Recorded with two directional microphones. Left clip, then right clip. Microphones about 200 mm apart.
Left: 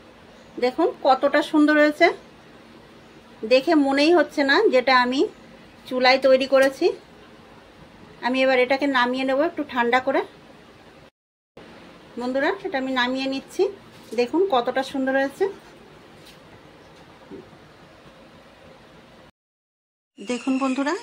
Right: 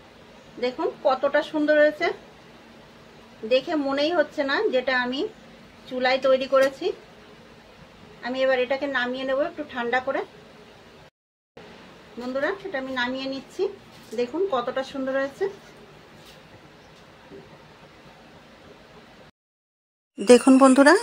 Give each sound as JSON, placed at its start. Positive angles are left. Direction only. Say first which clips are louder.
{"t": 0.6, "sound": "a woman's voice", "louder": "left 5 dB", "side_deg": 35}
{"t": 3.4, "sound": "a woman's voice", "louder": "left 5 dB", "side_deg": 40}
{"t": 8.2, "sound": "a woman's voice", "louder": "left 3 dB", "side_deg": 40}
{"t": 12.4, "sound": "a woman's voice", "louder": "left 3 dB", "side_deg": 35}
{"t": 20.2, "sound": "speech", "louder": "right 11 dB", "side_deg": -40}